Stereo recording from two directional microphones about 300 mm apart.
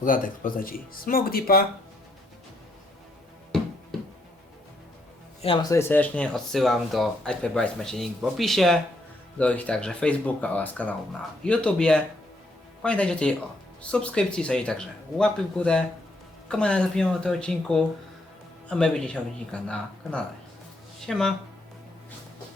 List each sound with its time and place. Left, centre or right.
0.0 s speech: left
5.4 s speech: centre